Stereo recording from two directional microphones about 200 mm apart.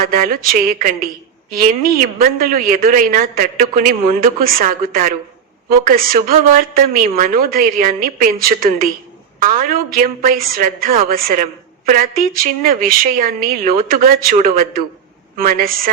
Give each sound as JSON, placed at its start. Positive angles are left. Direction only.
{"t": 0.0, "sound": "a woman's voice", "side_deg": -45}